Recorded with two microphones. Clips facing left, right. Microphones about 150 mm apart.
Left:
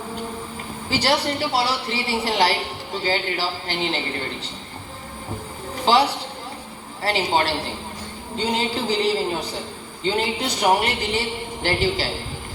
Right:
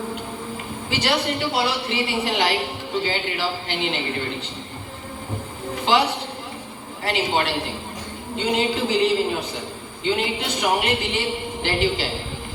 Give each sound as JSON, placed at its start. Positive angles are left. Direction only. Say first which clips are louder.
{"t": 0.9, "sound": "a woman's voice", "louder": "left 2 dB", "side_deg": 35}
{"t": 5.8, "sound": "a woman's voice", "louder": "left 2 dB", "side_deg": 35}